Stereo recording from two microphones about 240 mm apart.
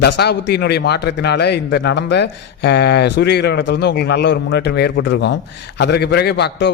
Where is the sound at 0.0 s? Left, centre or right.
Left.